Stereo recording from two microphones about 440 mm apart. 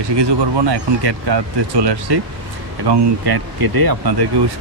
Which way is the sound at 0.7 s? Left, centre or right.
Right.